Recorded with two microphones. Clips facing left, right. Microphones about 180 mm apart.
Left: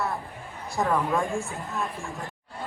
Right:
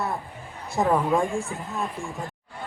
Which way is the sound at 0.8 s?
20° right (ahead or behind).